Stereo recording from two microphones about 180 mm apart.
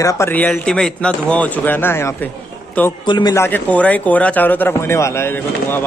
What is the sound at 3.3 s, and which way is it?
A man's voice, 10° left (ahead or behind).